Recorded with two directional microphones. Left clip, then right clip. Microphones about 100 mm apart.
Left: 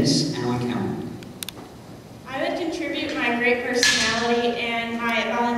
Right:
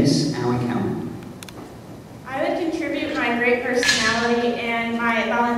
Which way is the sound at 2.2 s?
25° left (ahead or behind).